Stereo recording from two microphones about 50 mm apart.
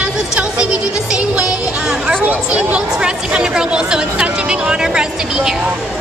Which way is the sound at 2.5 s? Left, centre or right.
Right.